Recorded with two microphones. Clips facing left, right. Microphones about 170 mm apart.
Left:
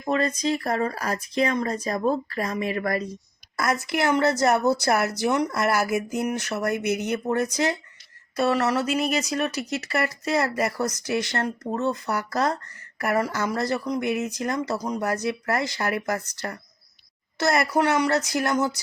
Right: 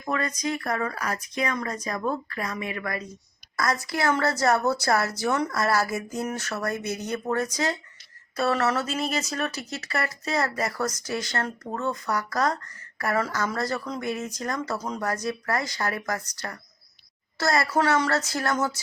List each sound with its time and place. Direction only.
0.0 s speech: 25° left (ahead or behind)
3.6 s a woman's voice: 25° left (ahead or behind)